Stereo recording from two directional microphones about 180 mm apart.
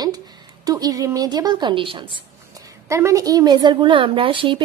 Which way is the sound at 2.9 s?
15° right (ahead or behind).